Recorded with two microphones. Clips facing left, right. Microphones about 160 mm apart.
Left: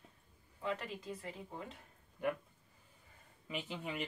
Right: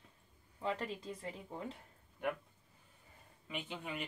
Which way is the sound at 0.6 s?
30° right (ahead or behind).